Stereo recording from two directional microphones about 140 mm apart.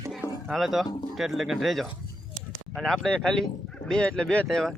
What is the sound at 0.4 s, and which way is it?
Speech, centre (ahead or behind).